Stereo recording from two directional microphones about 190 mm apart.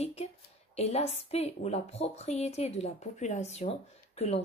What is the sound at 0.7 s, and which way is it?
Speech, 35° left (ahead or behind).